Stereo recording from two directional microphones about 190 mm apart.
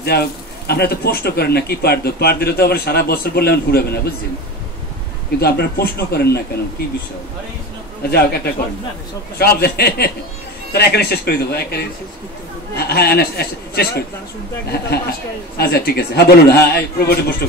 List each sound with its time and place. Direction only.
0.0 s speech: 55° left (ahead or behind)
5.4 s speech: 55° left (ahead or behind)
8.1 s speech: 55° left (ahead or behind)
9.4 s speech: 55° left (ahead or behind)
15.5 s speech: 55° left (ahead or behind)